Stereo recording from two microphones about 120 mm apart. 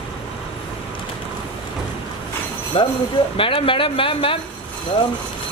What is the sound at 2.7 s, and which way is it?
Speech, 50° left (ahead or behind).